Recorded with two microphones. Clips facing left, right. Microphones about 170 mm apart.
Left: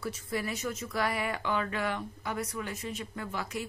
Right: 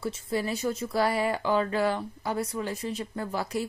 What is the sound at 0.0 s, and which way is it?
A woman's voice, 25° right (ahead or behind).